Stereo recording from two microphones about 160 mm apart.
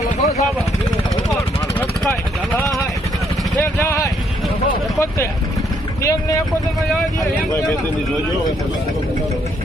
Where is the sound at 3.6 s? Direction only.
15° left (ahead or behind).